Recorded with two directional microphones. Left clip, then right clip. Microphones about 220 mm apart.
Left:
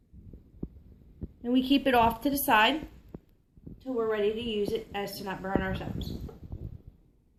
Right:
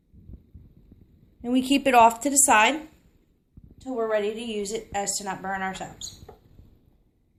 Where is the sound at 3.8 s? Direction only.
25° right (ahead or behind).